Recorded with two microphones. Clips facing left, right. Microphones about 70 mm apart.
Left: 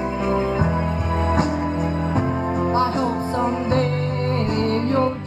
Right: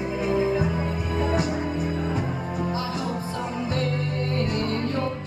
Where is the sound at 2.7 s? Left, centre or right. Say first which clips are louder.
Left 8 dB; left.